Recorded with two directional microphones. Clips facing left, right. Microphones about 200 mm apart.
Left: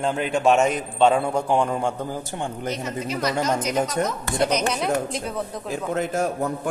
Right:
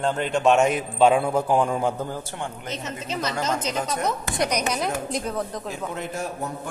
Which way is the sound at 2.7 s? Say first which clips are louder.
Left 3 dB; 25° right (ahead or behind).